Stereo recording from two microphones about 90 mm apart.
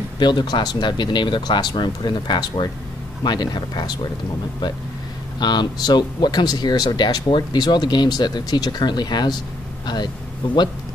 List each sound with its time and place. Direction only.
0.2 s speech: 55° left (ahead or behind)
5.4 s speech: 55° left (ahead or behind)